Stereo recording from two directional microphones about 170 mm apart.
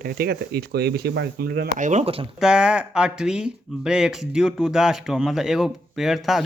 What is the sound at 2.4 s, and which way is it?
Speech, 5° right (ahead or behind).